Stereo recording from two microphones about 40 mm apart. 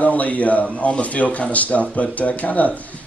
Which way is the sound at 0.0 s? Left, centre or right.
Left.